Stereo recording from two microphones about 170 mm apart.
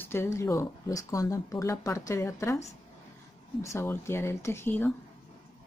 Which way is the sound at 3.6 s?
15° left (ahead or behind).